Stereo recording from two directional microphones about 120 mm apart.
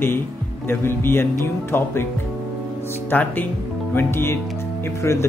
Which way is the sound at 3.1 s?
15° left (ahead or behind).